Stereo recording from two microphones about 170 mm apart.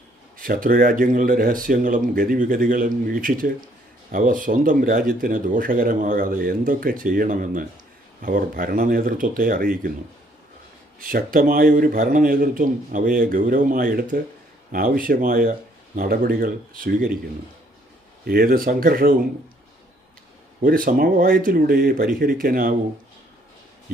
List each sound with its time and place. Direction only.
0.4 s speech: 55° right (ahead or behind)
11.0 s speech: 60° right (ahead or behind)
18.3 s speech: 60° right (ahead or behind)
20.6 s speech: 55° right (ahead or behind)